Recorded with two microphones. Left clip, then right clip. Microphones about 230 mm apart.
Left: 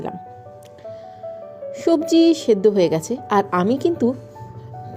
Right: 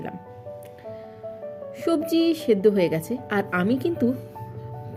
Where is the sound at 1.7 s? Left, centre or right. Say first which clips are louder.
Left 7 dB; centre.